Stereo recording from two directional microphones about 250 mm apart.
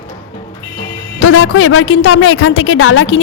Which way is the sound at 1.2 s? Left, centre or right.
Left.